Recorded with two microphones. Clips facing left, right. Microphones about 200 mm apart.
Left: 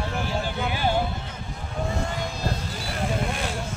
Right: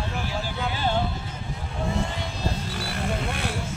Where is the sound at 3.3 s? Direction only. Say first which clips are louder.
Even; 65° right (ahead or behind).